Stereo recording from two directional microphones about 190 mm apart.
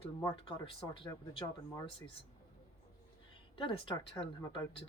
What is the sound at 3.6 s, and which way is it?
Speech, 25° left (ahead or behind).